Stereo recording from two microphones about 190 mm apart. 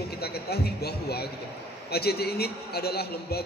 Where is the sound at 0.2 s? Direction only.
55° left (ahead or behind).